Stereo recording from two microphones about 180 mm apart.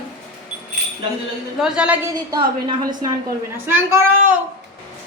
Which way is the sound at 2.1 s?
25° right (ahead or behind).